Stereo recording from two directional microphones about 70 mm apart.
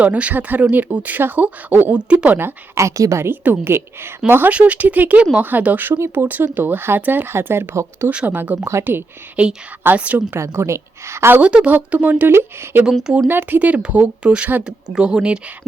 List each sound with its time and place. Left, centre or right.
0.0 s speech: right
1.9 s speech: centre
2.7 s speech: right
3.2 s a woman's voice: right
8.1 s speech: right
8.6 s a woman's voice: right
9.3 s speech: centre
10.3 s a woman's voice: right
11.3 s speech: centre
12.3 s a woman's voice: right; by 15.4 s centre